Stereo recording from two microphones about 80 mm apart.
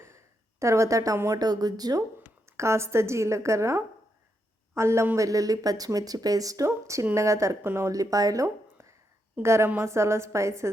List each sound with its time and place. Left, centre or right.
0.6 s a woman's voice: right
1.4 s speech: right
2.5 s a woman's voice: right
6.7 s a woman's voice: right
7.9 s a woman's voice: right